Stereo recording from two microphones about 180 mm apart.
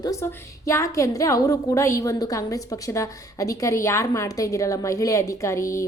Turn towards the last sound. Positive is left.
turn(degrees=15)  # may be behind; listen again after turning